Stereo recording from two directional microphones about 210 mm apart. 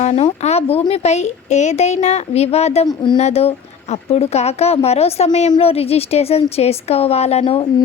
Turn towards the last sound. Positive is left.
turn(degrees=30)  # may be behind; listen again after turning